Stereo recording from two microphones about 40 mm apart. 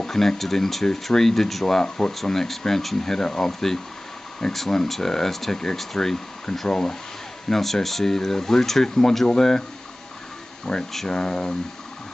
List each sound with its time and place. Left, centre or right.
0.0 s speech: centre
5.9 s speech: centre
10.6 s speech: centre